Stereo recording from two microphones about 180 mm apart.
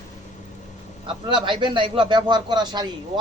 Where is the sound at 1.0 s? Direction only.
25° right (ahead or behind).